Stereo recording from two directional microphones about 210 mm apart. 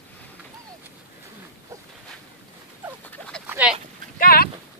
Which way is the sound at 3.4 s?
5° right (ahead or behind).